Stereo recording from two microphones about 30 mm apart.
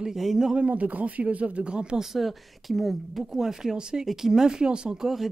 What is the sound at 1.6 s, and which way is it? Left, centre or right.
Speech, right.